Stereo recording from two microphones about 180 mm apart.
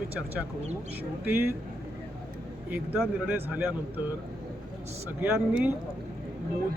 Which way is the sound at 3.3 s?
10° right (ahead or behind).